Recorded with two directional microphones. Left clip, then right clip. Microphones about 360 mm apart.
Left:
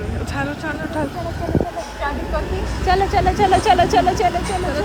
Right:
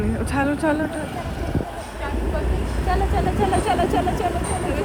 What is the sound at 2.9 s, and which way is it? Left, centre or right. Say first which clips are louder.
Speech: left 7 dB; left.